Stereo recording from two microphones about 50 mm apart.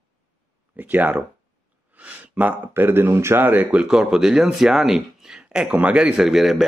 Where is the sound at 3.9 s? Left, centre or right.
Centre.